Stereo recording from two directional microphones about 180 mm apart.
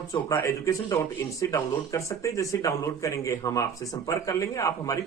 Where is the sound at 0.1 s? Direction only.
15° left (ahead or behind).